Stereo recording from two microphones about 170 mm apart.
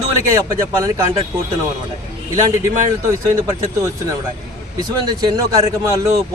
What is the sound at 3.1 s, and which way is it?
Speech, 15° right (ahead or behind).